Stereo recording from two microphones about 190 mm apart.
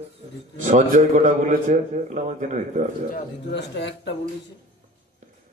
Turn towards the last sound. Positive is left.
turn(degrees=65)  # may be behind; listen again after turning